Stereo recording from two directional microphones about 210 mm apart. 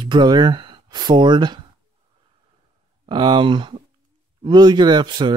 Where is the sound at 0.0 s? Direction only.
20° right (ahead or behind).